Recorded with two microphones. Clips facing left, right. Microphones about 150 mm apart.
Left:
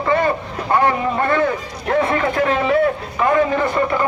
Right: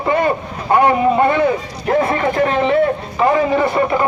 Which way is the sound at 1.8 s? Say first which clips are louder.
Right 2 dB; centre (ahead or behind).